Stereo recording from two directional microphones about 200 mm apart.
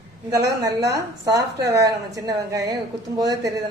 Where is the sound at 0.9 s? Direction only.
15° right (ahead or behind).